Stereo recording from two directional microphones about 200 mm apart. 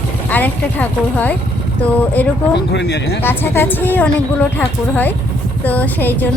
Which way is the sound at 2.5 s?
55° left (ahead or behind).